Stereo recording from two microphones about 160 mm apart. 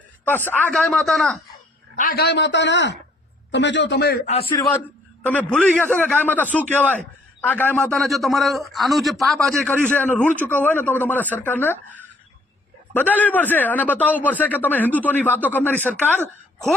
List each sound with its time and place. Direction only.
0.5 s a man's voice: 10° left (ahead or behind)
0.8 s a man's voice: centre (ahead or behind)
2.0 s a man's voice: 65° left (ahead or behind); by 4.2 s 90° left
4.3 s a man's voice: 35° left (ahead or behind)
5.2 s a man's voice: 10° left (ahead or behind)